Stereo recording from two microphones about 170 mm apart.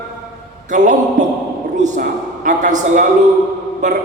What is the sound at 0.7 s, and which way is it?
A man's voice, 45° right (ahead or behind).